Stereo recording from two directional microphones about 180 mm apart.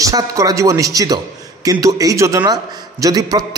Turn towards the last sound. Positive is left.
turn(degrees=-20)  # may be behind; listen again after turning